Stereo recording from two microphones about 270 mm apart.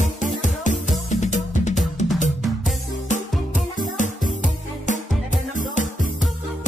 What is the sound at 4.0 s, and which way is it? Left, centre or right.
Music, left.